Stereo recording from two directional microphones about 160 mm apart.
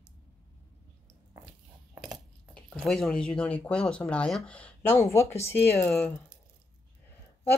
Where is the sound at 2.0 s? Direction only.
Centre (ahead or behind).